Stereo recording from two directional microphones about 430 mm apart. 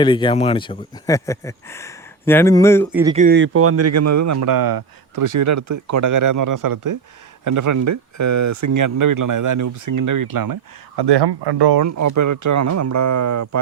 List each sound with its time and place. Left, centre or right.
0.0 s speech: centre
3.0 s speech: centre; by 11.8 s right
11.8 s speech: right